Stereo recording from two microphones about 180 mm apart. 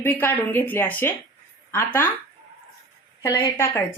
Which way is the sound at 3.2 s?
15° left (ahead or behind).